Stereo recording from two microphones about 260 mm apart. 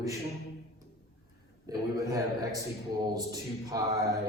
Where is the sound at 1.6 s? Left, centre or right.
Centre.